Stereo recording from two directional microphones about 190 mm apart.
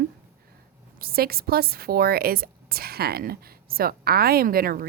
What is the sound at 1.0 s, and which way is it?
Speech, 55° right (ahead or behind).